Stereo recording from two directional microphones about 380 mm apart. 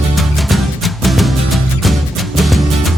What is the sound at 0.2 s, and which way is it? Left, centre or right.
Music, centre.